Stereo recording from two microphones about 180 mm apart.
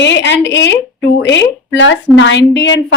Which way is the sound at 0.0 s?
80° left.